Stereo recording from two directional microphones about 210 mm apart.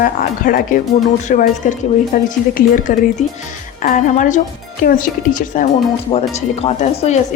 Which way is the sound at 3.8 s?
35° left (ahead or behind).